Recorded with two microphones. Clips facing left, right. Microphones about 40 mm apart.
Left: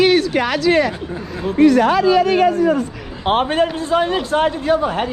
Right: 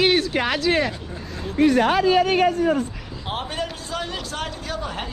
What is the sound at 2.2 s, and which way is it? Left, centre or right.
A man's voice, left.